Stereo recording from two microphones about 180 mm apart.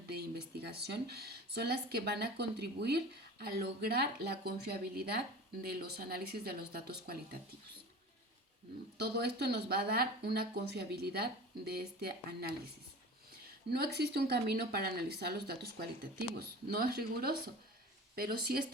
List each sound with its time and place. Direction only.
0.1 s speech: 60° right (ahead or behind)
9.0 s speech: 65° right (ahead or behind)
13.7 s speech: 60° right (ahead or behind)